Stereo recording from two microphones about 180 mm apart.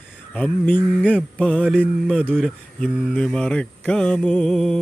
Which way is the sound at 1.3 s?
5° left (ahead or behind).